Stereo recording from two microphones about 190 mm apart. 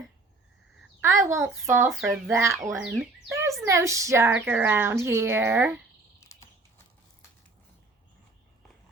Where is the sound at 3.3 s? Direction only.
15° right (ahead or behind).